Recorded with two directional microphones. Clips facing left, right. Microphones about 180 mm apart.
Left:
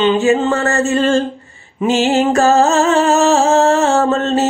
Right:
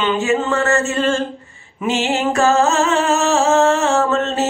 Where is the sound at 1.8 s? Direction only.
35° left (ahead or behind).